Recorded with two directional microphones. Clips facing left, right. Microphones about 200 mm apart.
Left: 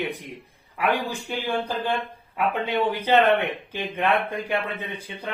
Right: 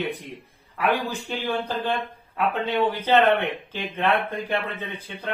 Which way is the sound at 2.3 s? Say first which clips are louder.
Even; 10° left (ahead or behind).